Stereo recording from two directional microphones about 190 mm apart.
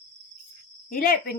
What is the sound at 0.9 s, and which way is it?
Speech, 50° left (ahead or behind).